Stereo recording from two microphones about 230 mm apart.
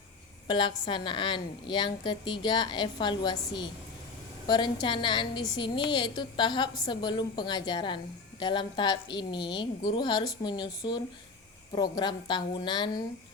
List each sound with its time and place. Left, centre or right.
0.4 s a woman's voice: centre
11.7 s a woman's voice: centre